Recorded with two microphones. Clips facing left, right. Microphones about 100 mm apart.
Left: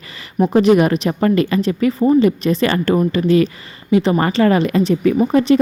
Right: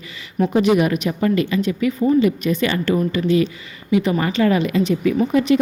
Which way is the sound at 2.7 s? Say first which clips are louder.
Left 3 dB; 45° left (ahead or behind).